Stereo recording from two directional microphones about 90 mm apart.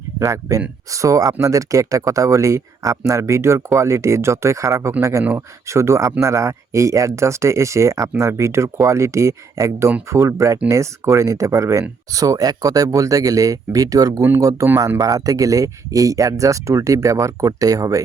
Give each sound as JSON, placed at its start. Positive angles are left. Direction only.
{"t": 0.2, "sound": "speech", "side_deg": -35}